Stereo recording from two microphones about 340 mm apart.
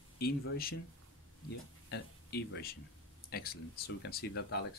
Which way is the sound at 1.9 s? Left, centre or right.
Left.